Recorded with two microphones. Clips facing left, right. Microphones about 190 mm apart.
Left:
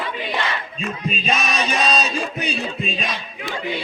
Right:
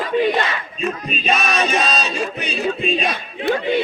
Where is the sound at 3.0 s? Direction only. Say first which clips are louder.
Right 8 dB; 60° right (ahead or behind).